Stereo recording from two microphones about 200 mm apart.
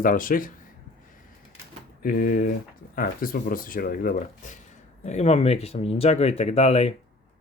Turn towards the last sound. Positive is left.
turn(degrees=30)  # may be behind; listen again after turning